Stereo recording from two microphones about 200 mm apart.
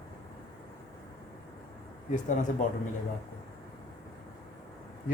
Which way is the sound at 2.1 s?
40° left (ahead or behind).